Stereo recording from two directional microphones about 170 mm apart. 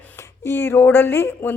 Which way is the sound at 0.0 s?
10° left (ahead or behind).